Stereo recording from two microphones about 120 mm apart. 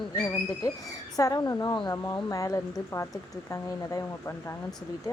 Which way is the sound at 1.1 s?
30° left (ahead or behind).